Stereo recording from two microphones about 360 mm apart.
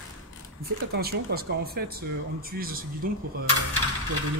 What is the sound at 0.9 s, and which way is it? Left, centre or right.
Speech, right.